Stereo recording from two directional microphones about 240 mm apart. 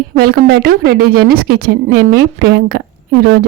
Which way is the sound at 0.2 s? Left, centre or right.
Right.